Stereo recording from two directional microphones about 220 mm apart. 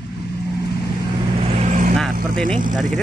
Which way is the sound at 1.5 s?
30° right (ahead or behind).